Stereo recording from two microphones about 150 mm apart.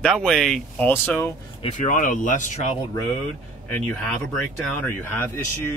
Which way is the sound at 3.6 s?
10° left (ahead or behind).